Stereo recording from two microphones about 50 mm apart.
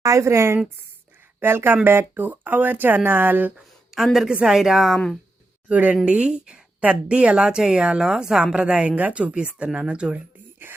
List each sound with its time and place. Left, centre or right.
0.1 s speech: right
1.4 s speech: right
2.2 s speech: right
3.9 s speech: centre
5.6 s speech: right
9.0 s speech: right
9.3 s speech: centre
10.6 s speech: right